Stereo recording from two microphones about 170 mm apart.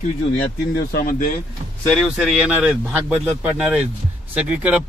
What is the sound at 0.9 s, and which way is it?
Speech, 55° left (ahead or behind).